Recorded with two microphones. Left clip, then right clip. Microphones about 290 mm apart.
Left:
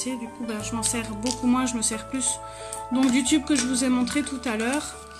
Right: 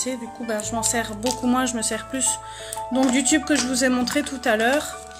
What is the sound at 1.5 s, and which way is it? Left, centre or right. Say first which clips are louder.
Speech: right 3 dB; centre.